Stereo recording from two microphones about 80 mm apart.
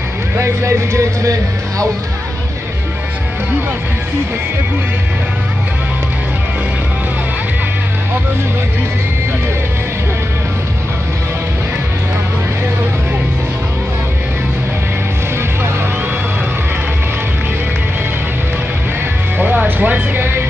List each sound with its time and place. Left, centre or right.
0.4 s speech: right
19.3 s speech: right